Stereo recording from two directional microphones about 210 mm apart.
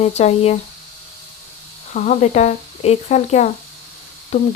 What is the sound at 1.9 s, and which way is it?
Speech, 35° left (ahead or behind).